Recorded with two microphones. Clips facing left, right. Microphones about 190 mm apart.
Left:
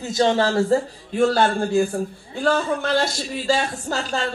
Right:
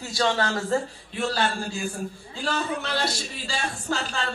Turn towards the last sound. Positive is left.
turn(degrees=40)  # may be behind; listen again after turning